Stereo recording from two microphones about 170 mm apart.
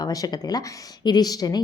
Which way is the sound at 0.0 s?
20° left (ahead or behind).